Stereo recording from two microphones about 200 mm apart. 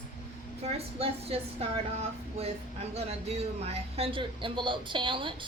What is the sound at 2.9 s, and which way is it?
Speech, 30° right (ahead or behind).